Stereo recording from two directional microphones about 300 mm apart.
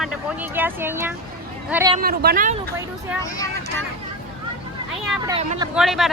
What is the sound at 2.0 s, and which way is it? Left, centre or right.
Speech, right.